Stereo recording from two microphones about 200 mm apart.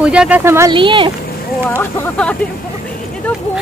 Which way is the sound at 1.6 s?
10° left (ahead or behind).